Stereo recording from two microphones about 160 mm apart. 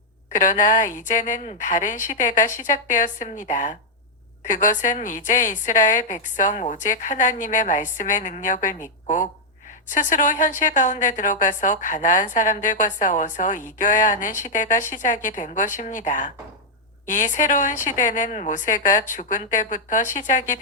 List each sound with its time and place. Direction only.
0.3 s a woman's voice: 55° left (ahead or behind)